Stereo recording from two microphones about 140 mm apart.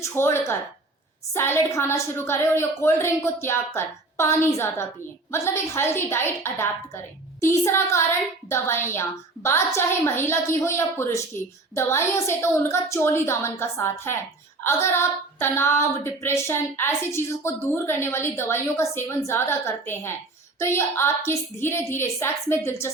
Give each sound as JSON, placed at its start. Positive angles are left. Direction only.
{"t": 0.0, "sound": "a woman's voice", "side_deg": 20}